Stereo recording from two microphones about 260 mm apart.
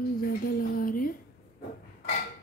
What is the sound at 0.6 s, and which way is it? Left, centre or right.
Speech, left.